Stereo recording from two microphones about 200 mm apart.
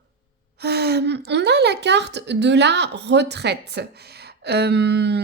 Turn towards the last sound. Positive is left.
turn(degrees=-55)  # may be behind; listen again after turning